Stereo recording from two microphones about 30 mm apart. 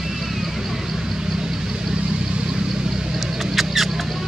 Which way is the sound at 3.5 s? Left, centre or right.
Centre.